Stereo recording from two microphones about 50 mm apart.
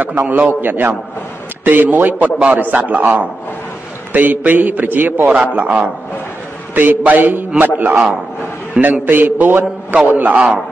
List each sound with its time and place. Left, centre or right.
0.0 s a man's voice: right